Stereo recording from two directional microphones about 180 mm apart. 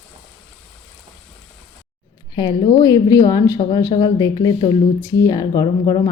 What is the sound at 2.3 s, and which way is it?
A woman's voice, 25° left (ahead or behind).